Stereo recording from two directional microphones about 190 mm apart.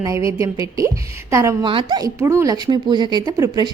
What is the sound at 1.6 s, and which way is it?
A woman's voice, 25° right (ahead or behind).